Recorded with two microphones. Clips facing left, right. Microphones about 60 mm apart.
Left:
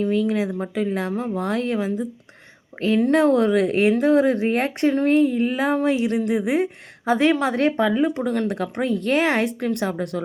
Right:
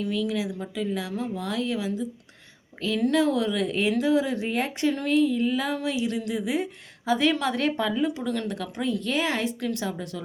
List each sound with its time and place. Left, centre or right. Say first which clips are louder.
0.0 s speech: left 6 dB; left
3.1 s speech: left 6 dB; left